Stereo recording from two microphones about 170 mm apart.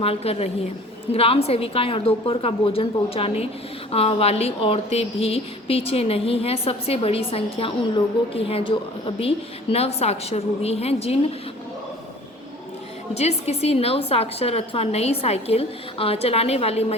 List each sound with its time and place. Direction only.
0.0 s a woman's voice: 35° left (ahead or behind)
13.1 s a woman's voice: 40° left (ahead or behind)